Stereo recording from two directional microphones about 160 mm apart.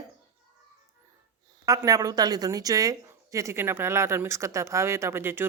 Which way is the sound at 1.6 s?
20° right (ahead or behind).